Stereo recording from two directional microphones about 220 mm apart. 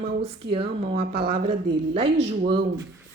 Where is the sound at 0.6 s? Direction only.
45° right (ahead or behind).